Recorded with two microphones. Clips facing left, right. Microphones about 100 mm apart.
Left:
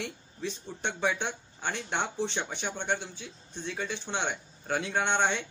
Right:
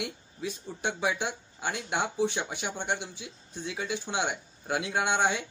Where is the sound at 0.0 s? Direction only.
10° right (ahead or behind).